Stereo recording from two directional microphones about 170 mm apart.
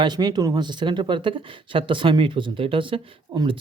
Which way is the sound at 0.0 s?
25° right (ahead or behind).